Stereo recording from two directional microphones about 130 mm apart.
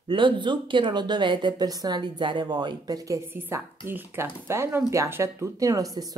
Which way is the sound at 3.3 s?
15° right (ahead or behind).